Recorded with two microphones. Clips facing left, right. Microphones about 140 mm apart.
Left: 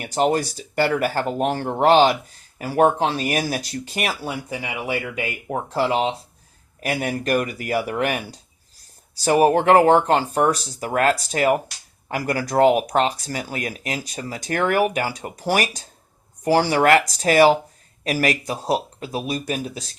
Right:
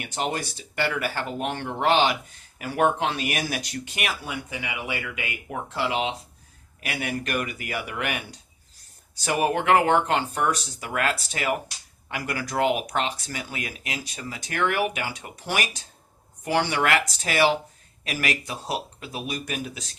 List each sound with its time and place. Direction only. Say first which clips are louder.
0.0 s speech: left 9 dB; 40° left (ahead or behind)